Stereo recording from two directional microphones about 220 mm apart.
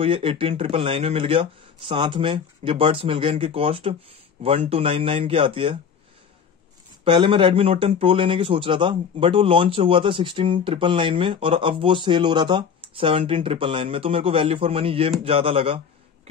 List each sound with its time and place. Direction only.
0.0 s speech: 25° right (ahead or behind)
7.1 s speech: 25° right (ahead or behind)